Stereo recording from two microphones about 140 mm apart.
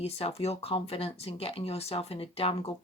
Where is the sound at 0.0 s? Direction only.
45° left (ahead or behind).